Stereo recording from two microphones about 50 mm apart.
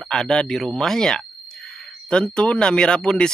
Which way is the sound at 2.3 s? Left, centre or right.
Centre.